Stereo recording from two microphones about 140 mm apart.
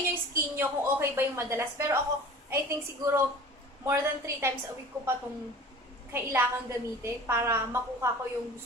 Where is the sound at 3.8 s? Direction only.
20° right (ahead or behind).